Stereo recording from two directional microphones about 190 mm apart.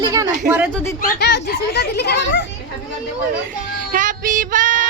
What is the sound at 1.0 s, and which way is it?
A child's voice, 55° left (ahead or behind).